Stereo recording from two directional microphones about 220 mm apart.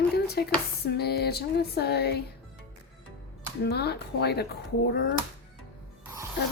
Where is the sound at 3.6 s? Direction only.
45° left (ahead or behind).